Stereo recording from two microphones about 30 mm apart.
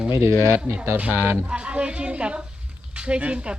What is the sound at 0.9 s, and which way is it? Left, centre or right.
Speech, right.